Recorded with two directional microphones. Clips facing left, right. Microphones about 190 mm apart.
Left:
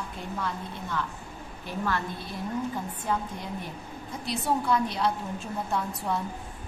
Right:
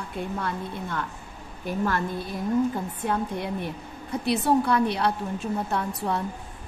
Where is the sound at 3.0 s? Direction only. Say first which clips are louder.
Right 5 dB; 65° right (ahead or behind).